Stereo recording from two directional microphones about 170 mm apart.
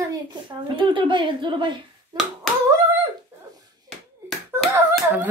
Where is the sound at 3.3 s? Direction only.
15° right (ahead or behind).